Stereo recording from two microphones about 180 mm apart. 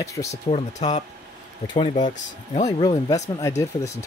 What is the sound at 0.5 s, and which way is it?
Speech, 35° left (ahead or behind).